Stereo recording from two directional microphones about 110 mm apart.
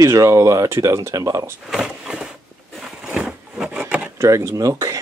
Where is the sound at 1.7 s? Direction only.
5° right (ahead or behind).